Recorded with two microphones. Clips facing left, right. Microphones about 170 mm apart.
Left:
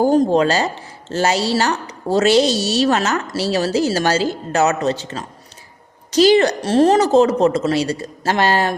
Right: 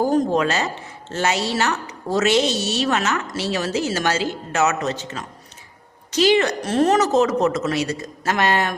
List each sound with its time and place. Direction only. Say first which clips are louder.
0.0 s a woman's voice: left 4 dB; 30° left (ahead or behind)